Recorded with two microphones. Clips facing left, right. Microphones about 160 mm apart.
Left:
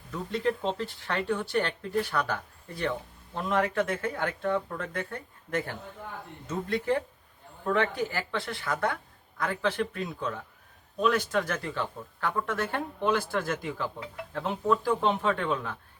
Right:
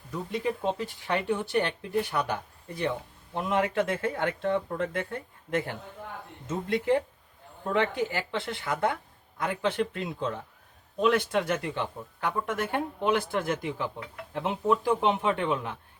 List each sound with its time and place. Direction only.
0.1 s speech: 10° right (ahead or behind)